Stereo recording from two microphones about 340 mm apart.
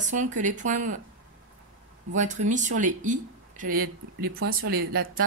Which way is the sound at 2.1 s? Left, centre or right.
Right.